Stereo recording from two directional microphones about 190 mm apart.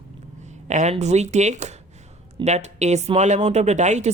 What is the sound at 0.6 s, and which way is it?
Speech, 35° right (ahead or behind).